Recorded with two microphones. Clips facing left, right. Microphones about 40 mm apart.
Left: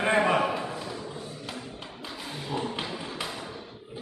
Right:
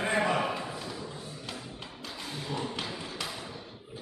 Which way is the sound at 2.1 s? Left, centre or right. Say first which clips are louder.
Left 3 dB; centre.